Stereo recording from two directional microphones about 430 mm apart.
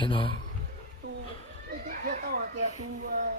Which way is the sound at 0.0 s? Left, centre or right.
Centre.